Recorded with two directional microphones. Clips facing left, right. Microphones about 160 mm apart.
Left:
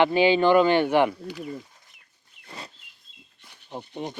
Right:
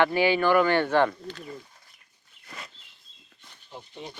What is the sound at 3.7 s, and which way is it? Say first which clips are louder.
Speech: left 7 dB; 55° left (ahead or behind).